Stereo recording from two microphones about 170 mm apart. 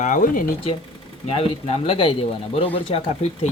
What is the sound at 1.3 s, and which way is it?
Speech, 35° left (ahead or behind).